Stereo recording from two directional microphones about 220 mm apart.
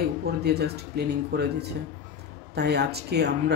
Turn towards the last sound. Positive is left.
turn(degrees=-50)  # may be behind; listen again after turning